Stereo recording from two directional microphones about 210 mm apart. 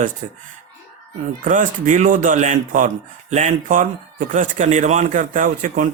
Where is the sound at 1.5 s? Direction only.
40° right (ahead or behind).